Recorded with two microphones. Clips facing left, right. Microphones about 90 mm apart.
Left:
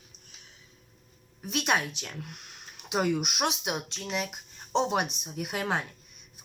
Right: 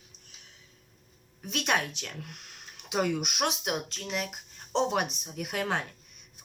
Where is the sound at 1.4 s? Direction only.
10° left (ahead or behind).